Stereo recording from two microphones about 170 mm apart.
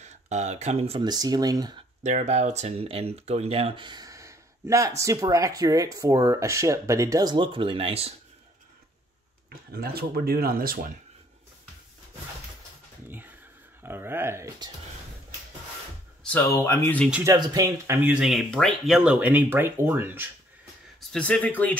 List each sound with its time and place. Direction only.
0.0 s speech: 40° right (ahead or behind)
1.0 s speech: 25° right (ahead or behind)
2.0 s speech: 40° right (ahead or behind)
9.7 s speech: 65° right (ahead or behind)
13.8 s speech: 15° right (ahead or behind)
16.4 s speech: 15° left (ahead or behind)
17.1 s speech: 20° right (ahead or behind)
21.1 s speech: 5° left (ahead or behind)